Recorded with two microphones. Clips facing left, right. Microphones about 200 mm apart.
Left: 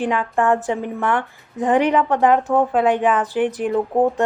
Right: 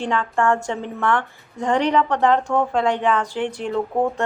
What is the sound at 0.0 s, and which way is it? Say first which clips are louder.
Speech: left 2 dB; 15° left (ahead or behind).